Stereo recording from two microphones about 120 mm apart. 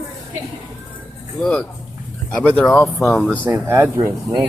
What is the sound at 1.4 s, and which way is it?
Speech, 5° left (ahead or behind).